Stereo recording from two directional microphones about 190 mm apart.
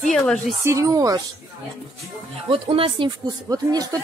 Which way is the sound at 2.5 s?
30° right (ahead or behind).